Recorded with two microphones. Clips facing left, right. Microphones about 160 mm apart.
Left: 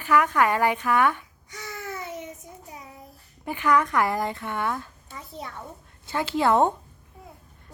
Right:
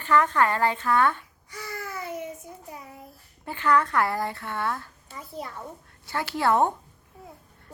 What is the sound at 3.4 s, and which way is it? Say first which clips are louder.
Speech: left 1 dB; 15° left (ahead or behind).